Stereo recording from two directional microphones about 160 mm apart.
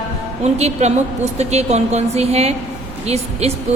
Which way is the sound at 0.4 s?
45° right (ahead or behind).